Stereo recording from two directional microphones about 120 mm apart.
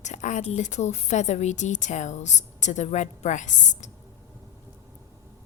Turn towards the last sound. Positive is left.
turn(degrees=90)